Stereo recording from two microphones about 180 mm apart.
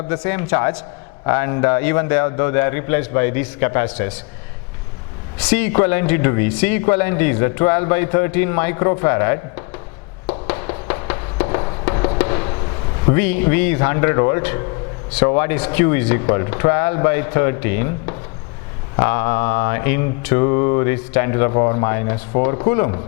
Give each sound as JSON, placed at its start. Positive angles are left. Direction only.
{"t": 0.1, "sound": "speech", "side_deg": 15}
{"t": 5.4, "sound": "speech", "side_deg": 10}
{"t": 10.4, "sound": "music", "side_deg": 15}
{"t": 12.2, "sound": "a sound", "side_deg": 20}
{"t": 13.1, "sound": "speech", "side_deg": 15}